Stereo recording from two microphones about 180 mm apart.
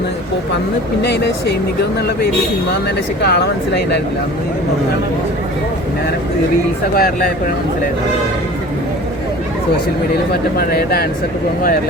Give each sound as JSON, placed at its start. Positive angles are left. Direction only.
{"t": 1.0, "sound": "speech", "side_deg": 70}
{"t": 3.2, "sound": "speech", "side_deg": 65}
{"t": 6.9, "sound": "speech", "side_deg": 55}
{"t": 10.6, "sound": "speech", "side_deg": 60}